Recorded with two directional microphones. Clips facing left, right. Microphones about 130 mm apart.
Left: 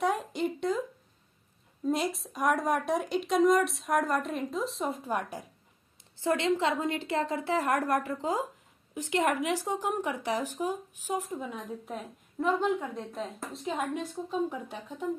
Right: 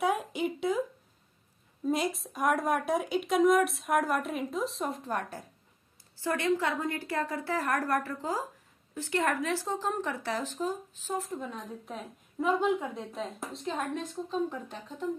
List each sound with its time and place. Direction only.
0.0 s a sound: centre (ahead or behind)
1.9 s speech: centre (ahead or behind)
5.1 s speech: 10° left (ahead or behind)
6.2 s a woman's voice: 25° left (ahead or behind)